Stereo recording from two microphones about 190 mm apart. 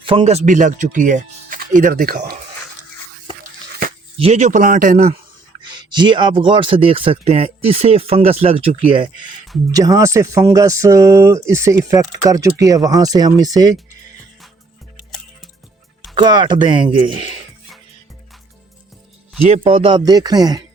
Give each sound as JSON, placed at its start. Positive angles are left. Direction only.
{"t": 0.0, "sound": "speech", "side_deg": -25}
{"t": 4.2, "sound": "a man's voice", "side_deg": -35}
{"t": 5.5, "sound": "speech", "side_deg": -25}
{"t": 16.1, "sound": "speech", "side_deg": -25}
{"t": 19.5, "sound": "speech", "side_deg": -30}